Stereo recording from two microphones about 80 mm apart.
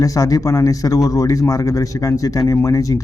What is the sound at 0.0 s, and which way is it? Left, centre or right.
Speech, left.